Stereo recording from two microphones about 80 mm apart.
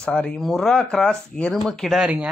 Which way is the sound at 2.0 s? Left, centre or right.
Centre.